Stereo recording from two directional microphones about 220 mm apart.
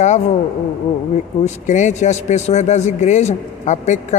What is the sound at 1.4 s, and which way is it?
A man's voice, 35° left (ahead or behind).